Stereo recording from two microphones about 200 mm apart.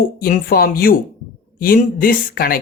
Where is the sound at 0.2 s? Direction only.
45° left (ahead or behind).